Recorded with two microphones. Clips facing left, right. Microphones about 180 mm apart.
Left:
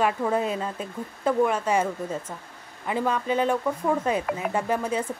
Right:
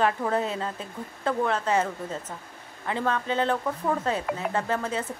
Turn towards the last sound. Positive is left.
turn(degrees=15)  # may be behind; listen again after turning